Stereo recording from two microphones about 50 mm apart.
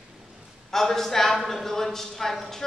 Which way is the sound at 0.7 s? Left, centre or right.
Centre.